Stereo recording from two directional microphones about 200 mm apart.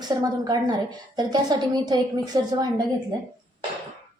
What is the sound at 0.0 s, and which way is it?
A woman's voice, 20° right (ahead or behind).